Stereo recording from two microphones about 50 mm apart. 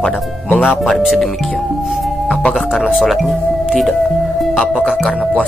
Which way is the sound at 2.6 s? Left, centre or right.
Centre.